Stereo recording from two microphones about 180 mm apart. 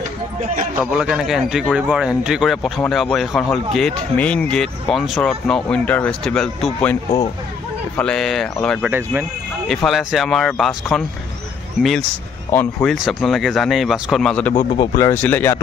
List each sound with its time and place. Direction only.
0.7 s speech: 5° right (ahead or behind)
8.0 s speech: 5° left (ahead or behind)
12.5 s speech: centre (ahead or behind)
14.5 s speech: 30° left (ahead or behind)
15.0 s speech: 10° left (ahead or behind)